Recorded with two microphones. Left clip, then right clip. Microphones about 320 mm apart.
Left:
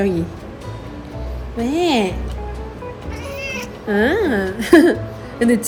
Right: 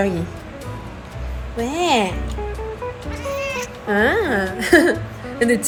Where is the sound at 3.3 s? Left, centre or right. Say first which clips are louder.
Right 3 dB; centre.